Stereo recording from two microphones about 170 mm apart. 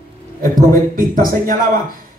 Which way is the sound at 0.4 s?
55° right (ahead or behind).